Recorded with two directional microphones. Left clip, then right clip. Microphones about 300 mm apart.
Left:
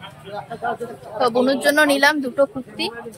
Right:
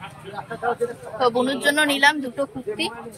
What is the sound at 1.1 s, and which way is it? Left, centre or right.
A woman's voice, centre.